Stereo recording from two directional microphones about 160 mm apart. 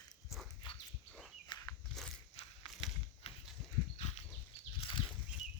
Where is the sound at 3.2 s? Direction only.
35° left (ahead or behind).